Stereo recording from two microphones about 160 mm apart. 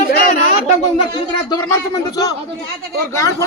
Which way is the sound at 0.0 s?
70° left (ahead or behind).